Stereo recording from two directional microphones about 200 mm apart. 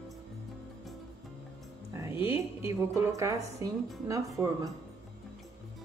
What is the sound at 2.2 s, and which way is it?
A woman's voice, 10° right (ahead or behind).